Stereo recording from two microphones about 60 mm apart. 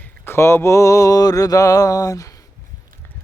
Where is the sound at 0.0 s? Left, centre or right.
Left.